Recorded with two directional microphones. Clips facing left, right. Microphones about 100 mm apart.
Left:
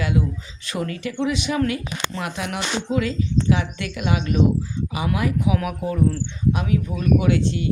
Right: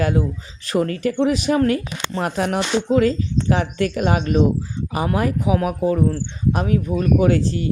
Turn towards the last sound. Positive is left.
turn(degrees=-40)  # may be behind; listen again after turning